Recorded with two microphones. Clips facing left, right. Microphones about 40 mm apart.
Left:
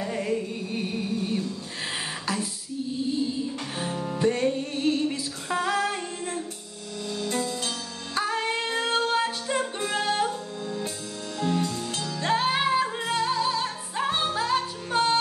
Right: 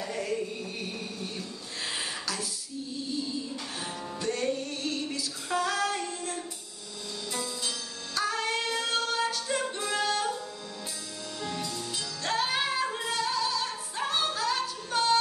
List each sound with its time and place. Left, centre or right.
0.0 s music: left
3.8 s music: left
7.1 s music: left
8.2 s music: left
11.3 s music: left
12.2 s music: left